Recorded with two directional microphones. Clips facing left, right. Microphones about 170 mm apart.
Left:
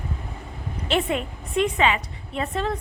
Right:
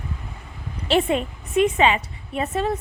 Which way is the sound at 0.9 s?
20° right (ahead or behind).